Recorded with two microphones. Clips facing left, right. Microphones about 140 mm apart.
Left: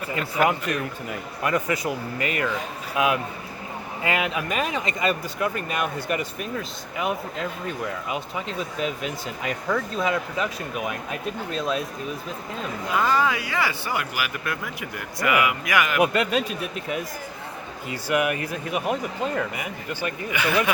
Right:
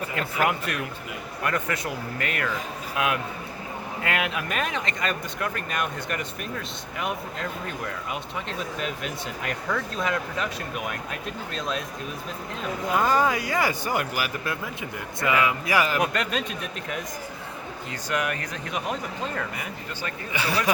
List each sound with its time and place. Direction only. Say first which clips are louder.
0.2 s speech: left 3 dB; centre (ahead or behind)
12.9 s speech: even; 45° right (ahead or behind)
14.4 s speech: even; 25° right (ahead or behind)
16.0 s speech: left 5 dB; 5° left (ahead or behind)
18.1 s speech: left 5 dB; 10° left (ahead or behind)
20.3 s speech: left 3 dB; 35° right (ahead or behind)